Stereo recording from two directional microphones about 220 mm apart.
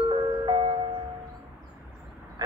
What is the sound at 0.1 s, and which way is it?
Music, 25° right (ahead or behind).